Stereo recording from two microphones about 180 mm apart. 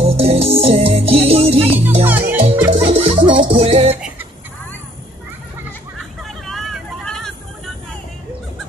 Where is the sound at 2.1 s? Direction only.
10° right (ahead or behind).